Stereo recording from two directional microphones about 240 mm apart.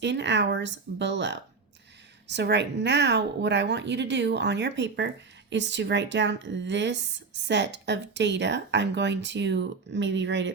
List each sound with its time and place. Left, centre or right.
0.0 s speech: right